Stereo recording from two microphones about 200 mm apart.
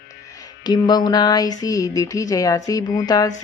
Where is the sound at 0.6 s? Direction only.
20° left (ahead or behind).